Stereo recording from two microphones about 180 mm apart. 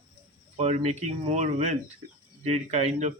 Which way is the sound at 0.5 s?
40° right (ahead or behind).